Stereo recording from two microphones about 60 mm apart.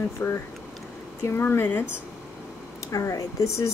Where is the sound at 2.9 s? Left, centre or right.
Left.